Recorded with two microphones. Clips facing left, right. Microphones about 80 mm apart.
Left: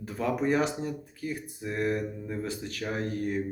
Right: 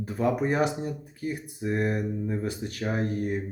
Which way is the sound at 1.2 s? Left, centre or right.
Right.